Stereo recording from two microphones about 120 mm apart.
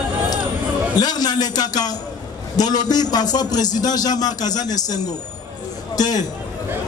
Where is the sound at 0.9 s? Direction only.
35° left (ahead or behind).